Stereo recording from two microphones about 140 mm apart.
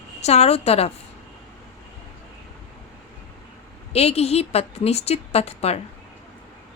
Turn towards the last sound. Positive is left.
turn(degrees=50)  # may be behind; listen again after turning